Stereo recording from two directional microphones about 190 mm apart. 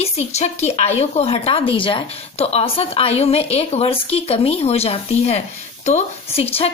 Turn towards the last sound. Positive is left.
turn(degrees=30)  # may be behind; listen again after turning